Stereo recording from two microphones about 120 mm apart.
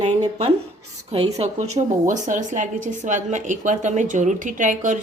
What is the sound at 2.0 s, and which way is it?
A woman's voice, 90° right.